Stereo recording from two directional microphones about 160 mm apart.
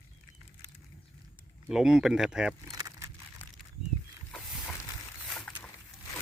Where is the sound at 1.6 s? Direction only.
5° right (ahead or behind).